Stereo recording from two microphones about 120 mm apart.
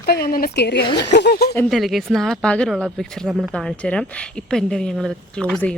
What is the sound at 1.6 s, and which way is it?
Speech, centre (ahead or behind).